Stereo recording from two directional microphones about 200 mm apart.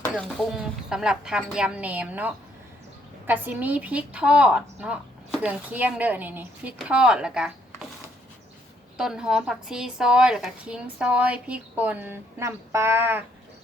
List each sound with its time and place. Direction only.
0.1 s a woman's voice: centre (ahead or behind)